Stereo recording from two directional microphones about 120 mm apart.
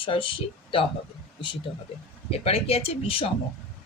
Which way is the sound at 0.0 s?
45° left (ahead or behind).